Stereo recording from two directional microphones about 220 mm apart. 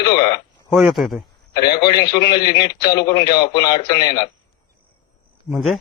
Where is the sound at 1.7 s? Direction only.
20° left (ahead or behind).